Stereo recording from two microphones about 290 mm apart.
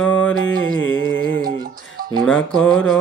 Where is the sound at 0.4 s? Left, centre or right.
Left.